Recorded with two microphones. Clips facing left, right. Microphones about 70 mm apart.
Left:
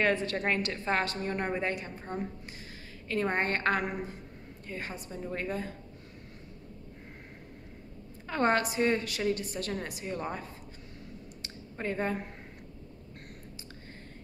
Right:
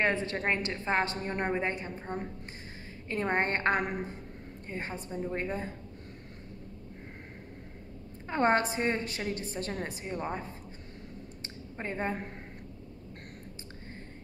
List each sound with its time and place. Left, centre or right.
0.0 s a woman's voice: right
8.3 s a woman's voice: right
10.1 s a woman's voice: right
11.8 s a woman's voice: right